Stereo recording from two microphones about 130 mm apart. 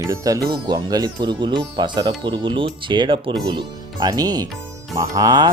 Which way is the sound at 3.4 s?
35° right (ahead or behind).